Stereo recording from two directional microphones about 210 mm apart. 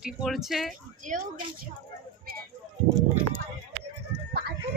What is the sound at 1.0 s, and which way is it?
Speech, 40° right (ahead or behind).